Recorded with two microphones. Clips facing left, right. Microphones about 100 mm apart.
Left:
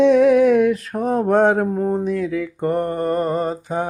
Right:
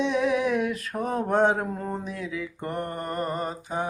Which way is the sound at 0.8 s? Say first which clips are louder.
Left 8 dB; 35° left (ahead or behind).